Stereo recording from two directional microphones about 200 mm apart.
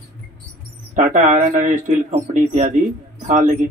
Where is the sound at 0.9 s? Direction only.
40° right (ahead or behind).